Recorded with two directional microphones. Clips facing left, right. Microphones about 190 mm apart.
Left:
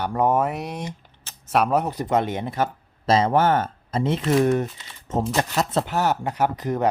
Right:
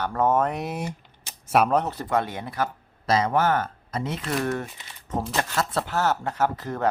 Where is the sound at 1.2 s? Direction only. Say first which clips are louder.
Right 1 dB; 15° right (ahead or behind).